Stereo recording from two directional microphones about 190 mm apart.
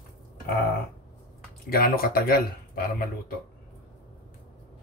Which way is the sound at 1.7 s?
50° left (ahead or behind).